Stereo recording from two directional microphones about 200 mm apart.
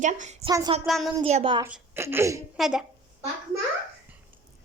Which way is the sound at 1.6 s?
10° right (ahead or behind).